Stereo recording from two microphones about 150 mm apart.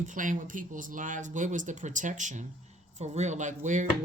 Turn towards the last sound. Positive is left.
turn(degrees=-55)  # may be behind; listen again after turning